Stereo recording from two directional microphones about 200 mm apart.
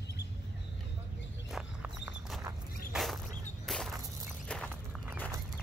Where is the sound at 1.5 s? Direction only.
5° right (ahead or behind).